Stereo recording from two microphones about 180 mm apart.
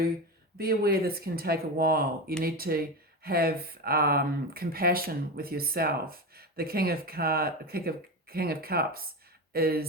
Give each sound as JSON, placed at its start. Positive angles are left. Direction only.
{"t": 0.6, "sound": "speech", "side_deg": -55}